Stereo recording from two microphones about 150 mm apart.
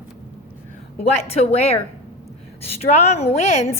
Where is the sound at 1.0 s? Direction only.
45° left (ahead or behind).